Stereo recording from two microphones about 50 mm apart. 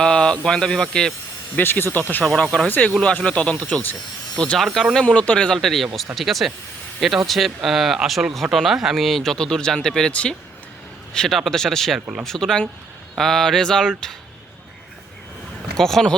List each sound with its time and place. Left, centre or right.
0.0 s speech: centre
1.5 s speech: left
2.3 s speech: centre
2.6 s speech: left
2.9 s speech: left
4.5 s speech: centre
5.0 s speech: left
5.5 s speech: centre
9.0 s speech: centre
10.1 s speech: left
11.1 s a man's voice: centre
15.8 s speech: centre